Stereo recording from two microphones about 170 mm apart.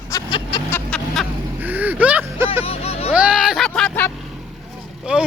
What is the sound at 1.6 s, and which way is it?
Vehicle, 10° right (ahead or behind).